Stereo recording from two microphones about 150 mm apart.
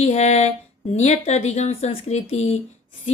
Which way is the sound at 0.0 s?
45° left (ahead or behind).